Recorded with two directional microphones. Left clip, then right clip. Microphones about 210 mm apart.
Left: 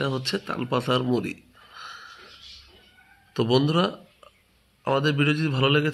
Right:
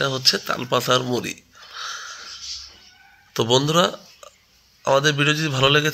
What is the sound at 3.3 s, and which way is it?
A man's voice, 10° right (ahead or behind).